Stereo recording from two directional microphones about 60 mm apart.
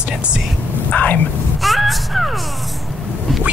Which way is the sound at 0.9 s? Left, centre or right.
Left.